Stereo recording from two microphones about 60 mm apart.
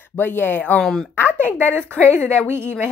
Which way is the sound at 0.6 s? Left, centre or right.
Left.